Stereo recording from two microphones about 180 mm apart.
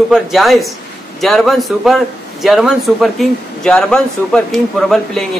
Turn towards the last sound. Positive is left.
turn(degrees=0)  # may be behind; listen again after turning